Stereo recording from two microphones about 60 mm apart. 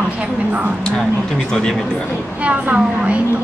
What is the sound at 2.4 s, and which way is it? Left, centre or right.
Speech, centre.